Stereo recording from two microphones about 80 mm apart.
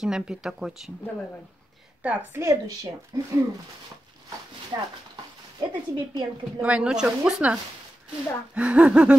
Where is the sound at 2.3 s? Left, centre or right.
Right.